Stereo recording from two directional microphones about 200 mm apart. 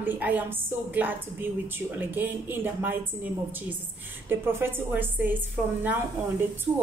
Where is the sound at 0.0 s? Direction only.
10° right (ahead or behind).